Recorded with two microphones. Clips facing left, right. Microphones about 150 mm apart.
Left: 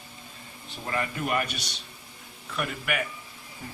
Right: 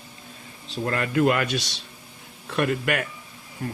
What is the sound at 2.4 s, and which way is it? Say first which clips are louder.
Speech: right 7 dB; 80° right.